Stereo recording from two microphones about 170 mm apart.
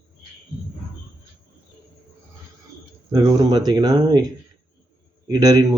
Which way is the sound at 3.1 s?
20° right (ahead or behind).